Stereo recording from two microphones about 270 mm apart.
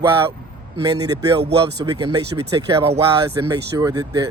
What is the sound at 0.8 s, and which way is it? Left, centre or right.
Speech, centre.